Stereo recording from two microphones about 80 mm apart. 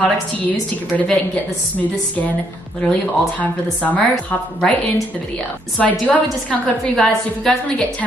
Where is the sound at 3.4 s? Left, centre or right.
Centre.